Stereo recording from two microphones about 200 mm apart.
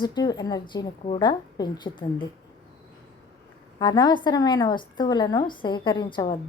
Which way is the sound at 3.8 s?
20° left (ahead or behind).